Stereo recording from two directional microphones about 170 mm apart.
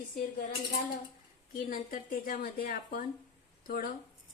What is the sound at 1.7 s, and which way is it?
Speech, 55° left (ahead or behind).